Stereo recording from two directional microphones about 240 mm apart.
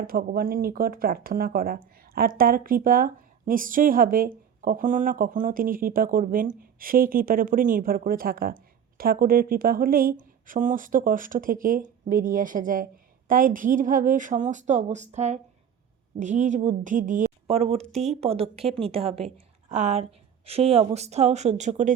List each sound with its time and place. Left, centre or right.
0.0 s a woman's voice: right